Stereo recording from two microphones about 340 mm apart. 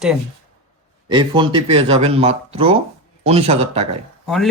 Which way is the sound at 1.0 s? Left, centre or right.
Centre.